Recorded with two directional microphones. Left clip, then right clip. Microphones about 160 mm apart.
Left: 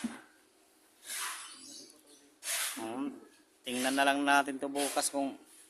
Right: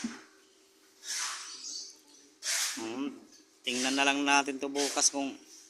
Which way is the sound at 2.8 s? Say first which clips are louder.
Right 1 dB; 15° left (ahead or behind).